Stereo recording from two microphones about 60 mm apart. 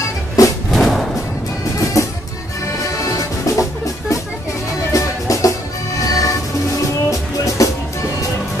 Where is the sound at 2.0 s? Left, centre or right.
Left.